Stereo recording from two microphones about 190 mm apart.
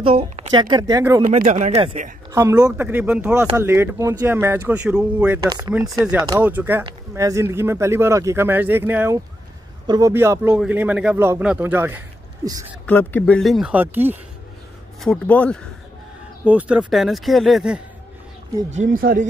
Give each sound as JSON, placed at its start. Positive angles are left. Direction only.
{"t": 0.0, "sound": "speech", "side_deg": -30}
{"t": 1.2, "sound": "speech", "side_deg": -45}
{"t": 2.3, "sound": "speech", "side_deg": -15}
{"t": 6.8, "sound": "speech", "side_deg": -20}
{"t": 12.8, "sound": "speech", "side_deg": 10}
{"t": 15.0, "sound": "speech", "side_deg": 5}
{"t": 16.4, "sound": "speech", "side_deg": -5}
{"t": 18.7, "sound": "speech", "side_deg": -45}